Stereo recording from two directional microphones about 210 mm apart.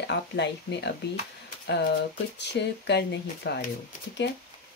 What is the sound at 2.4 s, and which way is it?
Speech, 55° left (ahead or behind).